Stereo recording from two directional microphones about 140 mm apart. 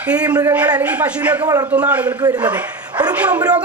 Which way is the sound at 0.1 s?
10° right (ahead or behind).